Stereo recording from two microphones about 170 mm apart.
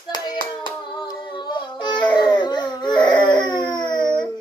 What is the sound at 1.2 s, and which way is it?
Child singing, 25° left (ahead or behind).